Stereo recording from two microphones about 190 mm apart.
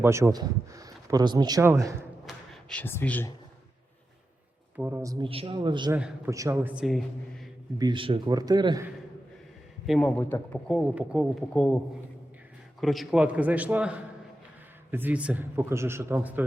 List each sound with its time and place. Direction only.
0.0 s speech: 15° right (ahead or behind)
2.2 s speech: centre (ahead or behind)
4.8 s a man's voice: 10° right (ahead or behind)
5.1 s a man's voice: 30° right (ahead or behind)
5.9 s a man's voice: 10° right (ahead or behind)
7.8 s a man's voice: 25° right (ahead or behind)
9.8 s speech: centre (ahead or behind)
12.8 s a man's voice: centre (ahead or behind)